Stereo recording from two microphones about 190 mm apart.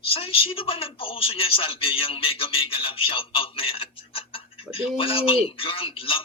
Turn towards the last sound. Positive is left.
turn(degrees=30)  # may be behind; listen again after turning